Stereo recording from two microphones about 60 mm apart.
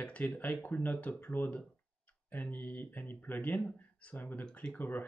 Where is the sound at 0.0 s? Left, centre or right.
Left.